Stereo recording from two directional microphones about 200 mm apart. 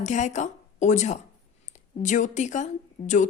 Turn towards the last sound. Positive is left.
turn(degrees=40)  # may be behind; listen again after turning